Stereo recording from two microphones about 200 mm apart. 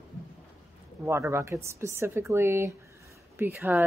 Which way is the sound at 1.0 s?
10° right (ahead or behind).